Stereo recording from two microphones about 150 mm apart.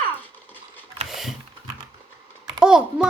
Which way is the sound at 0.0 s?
10° left (ahead or behind).